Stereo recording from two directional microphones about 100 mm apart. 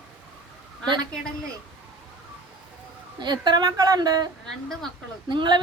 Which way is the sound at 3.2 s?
45° right (ahead or behind).